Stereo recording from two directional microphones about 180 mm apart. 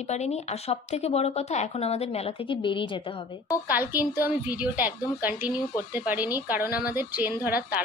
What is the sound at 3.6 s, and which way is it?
A woman's voice, 10° right (ahead or behind).